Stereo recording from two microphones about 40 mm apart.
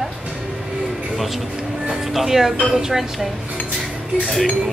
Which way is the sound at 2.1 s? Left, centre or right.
Centre.